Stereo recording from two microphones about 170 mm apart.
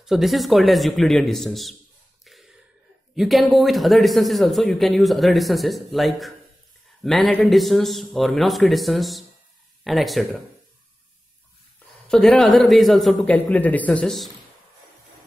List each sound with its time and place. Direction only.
0.0 s a man's voice: centre (ahead or behind)
3.2 s a man's voice: centre (ahead or behind)
12.1 s a man's voice: 5° left (ahead or behind)